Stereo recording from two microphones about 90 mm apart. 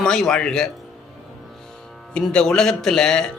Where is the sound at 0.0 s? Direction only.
5° left (ahead or behind).